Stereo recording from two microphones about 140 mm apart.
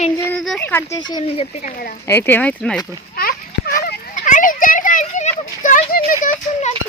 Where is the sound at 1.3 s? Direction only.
50° left (ahead or behind).